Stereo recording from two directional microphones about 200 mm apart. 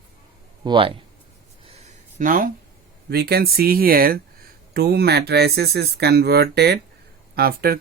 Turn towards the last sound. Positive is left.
turn(degrees=-50)  # may be behind; listen again after turning